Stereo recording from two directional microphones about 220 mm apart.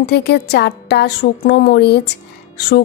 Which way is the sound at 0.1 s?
50° left (ahead or behind).